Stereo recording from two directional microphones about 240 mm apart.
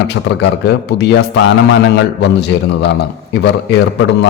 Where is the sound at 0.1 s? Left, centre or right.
Left.